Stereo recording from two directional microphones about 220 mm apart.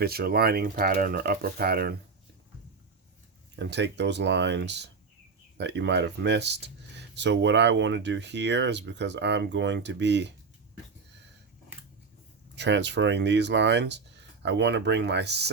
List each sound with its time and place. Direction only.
0.0 s speech: 45° right (ahead or behind)
3.5 s speech: 50° right (ahead or behind)
12.5 s speech: 50° right (ahead or behind)